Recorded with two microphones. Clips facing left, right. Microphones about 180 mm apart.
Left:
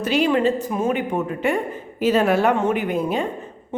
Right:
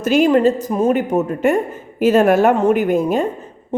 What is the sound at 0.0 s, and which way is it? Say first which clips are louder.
A woman's voice: right 5 dB; 45° right (ahead or behind).